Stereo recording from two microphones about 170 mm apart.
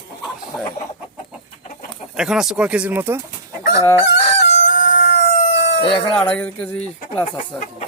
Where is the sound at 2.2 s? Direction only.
5° right (ahead or behind).